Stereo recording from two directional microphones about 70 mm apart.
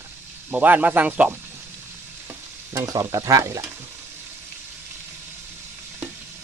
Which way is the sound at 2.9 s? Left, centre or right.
Right.